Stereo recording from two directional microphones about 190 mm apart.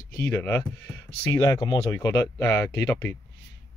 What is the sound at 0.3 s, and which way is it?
Speech, 15° left (ahead or behind).